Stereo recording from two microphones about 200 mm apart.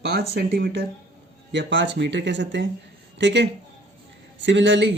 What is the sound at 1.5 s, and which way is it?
Speech, 65° right (ahead or behind).